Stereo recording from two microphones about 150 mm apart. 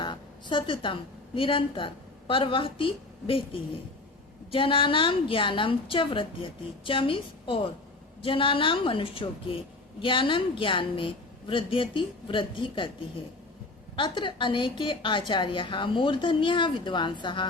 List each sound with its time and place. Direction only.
0.0 s a sound: 30° left (ahead or behind)
1.4 s a woman's voice: 35° left (ahead or behind)
13.9 s a woman's voice: 35° left (ahead or behind)